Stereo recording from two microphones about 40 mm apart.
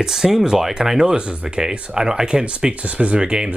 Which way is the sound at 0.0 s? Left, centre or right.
Centre.